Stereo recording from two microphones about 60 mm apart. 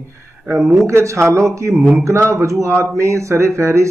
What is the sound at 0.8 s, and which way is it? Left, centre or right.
Speech, right.